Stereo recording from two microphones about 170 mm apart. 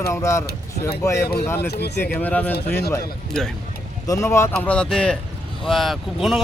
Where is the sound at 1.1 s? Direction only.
70° left (ahead or behind).